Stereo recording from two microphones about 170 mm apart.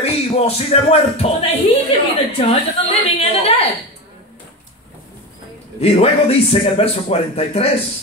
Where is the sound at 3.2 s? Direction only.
35° left (ahead or behind).